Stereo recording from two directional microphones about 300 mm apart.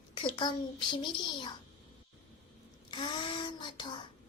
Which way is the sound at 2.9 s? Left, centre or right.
Centre.